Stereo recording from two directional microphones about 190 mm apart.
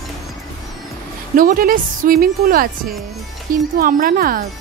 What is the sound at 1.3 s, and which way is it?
Speech, 45° right (ahead or behind).